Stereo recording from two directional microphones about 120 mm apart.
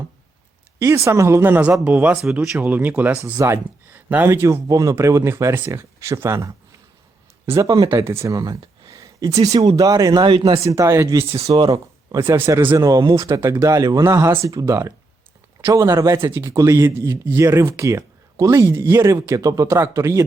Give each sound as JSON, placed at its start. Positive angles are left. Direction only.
{"t": 0.8, "sound": "speech", "side_deg": -20}
{"t": 8.9, "sound": "a sound", "side_deg": -30}
{"t": 9.7, "sound": "speech", "side_deg": -30}
{"t": 11.3, "sound": "speech", "side_deg": -50}
{"t": 11.7, "sound": "speech", "side_deg": -30}
{"t": 19.6, "sound": "speech", "side_deg": -20}